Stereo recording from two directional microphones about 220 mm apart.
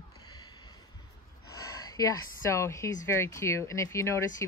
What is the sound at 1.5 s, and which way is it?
Speech, 15° left (ahead or behind).